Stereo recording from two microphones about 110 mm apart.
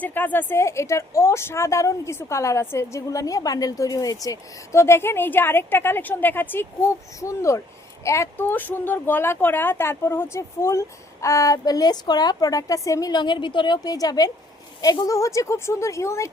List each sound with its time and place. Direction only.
0.0 s a woman's voice: 15° left (ahead or behind)